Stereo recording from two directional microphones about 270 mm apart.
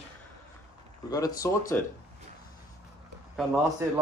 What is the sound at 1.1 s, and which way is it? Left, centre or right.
Speech, centre.